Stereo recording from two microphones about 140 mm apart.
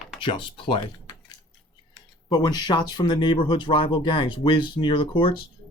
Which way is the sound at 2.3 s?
30° left (ahead or behind).